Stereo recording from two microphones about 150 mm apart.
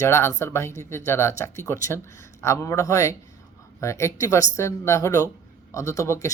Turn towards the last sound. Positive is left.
turn(degrees=20)  # may be behind; listen again after turning